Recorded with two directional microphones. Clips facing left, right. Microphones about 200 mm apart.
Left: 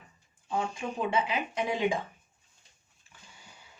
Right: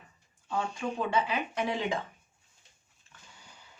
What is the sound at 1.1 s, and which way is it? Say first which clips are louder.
Speech: even; 15° left (ahead or behind).